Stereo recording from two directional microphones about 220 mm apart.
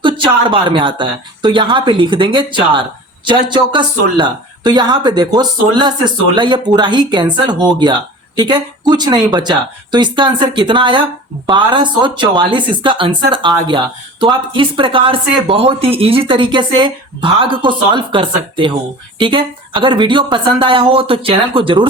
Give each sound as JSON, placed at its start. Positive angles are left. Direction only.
{"t": 0.0, "sound": "speech", "side_deg": -20}